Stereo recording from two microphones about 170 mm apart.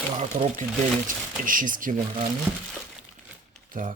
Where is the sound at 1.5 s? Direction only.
55° right (ahead or behind).